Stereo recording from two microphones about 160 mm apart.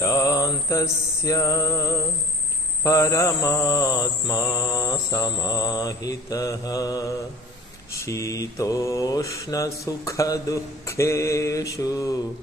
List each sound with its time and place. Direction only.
0.0 s mantra: 20° left (ahead or behind)